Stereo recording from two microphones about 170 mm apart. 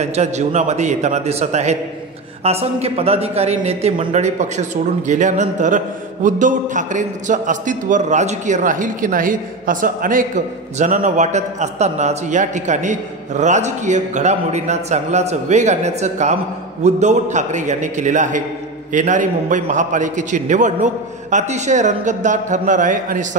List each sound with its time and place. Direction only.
0.0 s a man's voice: 40° right (ahead or behind)